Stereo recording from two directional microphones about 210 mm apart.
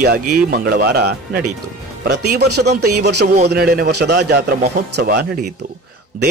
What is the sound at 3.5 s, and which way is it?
A man's voice, 50° right (ahead or behind).